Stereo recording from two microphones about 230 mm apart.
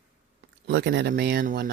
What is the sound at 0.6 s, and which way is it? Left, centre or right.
Speech, right.